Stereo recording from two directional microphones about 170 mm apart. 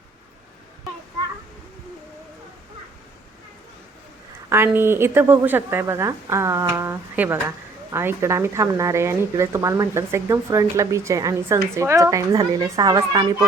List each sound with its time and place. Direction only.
4.4 s a woman's voice: 15° right (ahead or behind)